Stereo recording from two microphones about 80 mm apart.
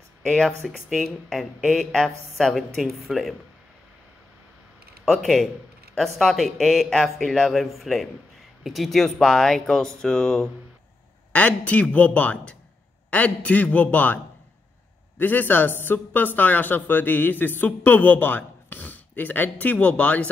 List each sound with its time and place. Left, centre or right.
0.3 s a woman's voice: centre
5.1 s a woman's voice: centre
11.3 s speech: centre